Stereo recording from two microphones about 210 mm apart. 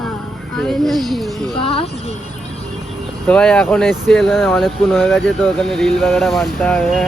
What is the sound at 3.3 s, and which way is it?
Speech, 5° left (ahead or behind).